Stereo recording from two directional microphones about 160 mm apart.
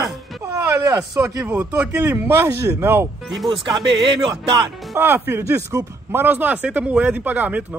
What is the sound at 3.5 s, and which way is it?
A man's voice, 30° right (ahead or behind).